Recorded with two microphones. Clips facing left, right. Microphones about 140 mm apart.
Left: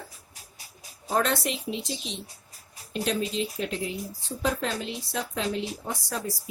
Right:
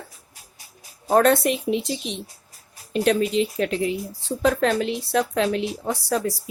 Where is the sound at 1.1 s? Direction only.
50° right (ahead or behind); by 6.2 s 70° right (ahead or behind).